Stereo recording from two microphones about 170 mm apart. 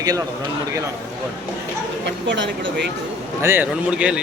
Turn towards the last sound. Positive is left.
turn(degrees=-5)  # may be behind; listen again after turning